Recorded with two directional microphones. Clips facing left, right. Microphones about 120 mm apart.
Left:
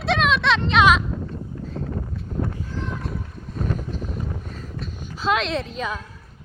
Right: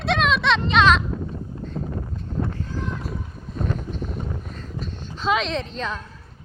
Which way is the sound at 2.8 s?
Centre (ahead or behind).